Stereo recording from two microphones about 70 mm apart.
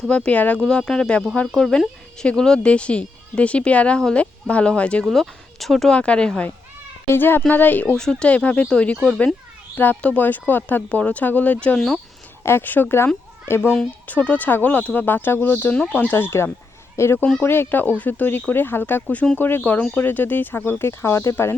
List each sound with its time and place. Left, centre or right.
0.1 s speech: centre
0.6 s speech: centre
5.0 s speech: centre
5.9 s speech: centre
7.1 s speech: left
7.9 s speech: centre
8.3 s speech: centre
12.4 s speech: left
14.1 s speech: left